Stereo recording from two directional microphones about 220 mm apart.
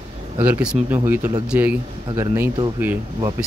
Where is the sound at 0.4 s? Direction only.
5° right (ahead or behind).